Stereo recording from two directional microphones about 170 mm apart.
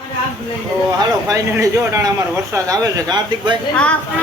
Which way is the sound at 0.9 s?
20° right (ahead or behind).